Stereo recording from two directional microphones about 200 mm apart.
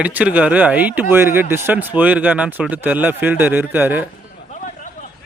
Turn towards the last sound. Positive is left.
turn(degrees=40)  # may be behind; listen again after turning